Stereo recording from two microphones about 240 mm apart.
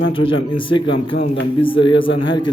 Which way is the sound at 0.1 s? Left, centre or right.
Left.